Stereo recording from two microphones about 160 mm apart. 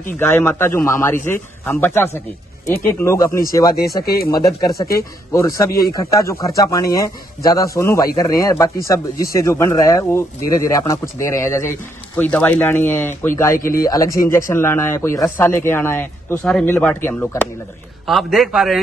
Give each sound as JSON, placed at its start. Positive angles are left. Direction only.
{"t": 0.2, "sound": "speech", "side_deg": 15}
{"t": 4.0, "sound": "speech", "side_deg": 70}
{"t": 4.3, "sound": "speech", "side_deg": 25}
{"t": 18.0, "sound": "a man's voice", "side_deg": 0}